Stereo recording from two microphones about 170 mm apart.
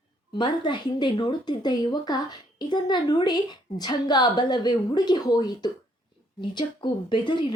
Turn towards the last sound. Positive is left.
turn(degrees=25)  # may be behind; listen again after turning